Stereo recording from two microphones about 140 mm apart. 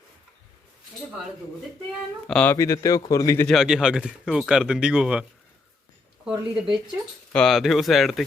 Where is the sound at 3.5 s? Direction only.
5° right (ahead or behind).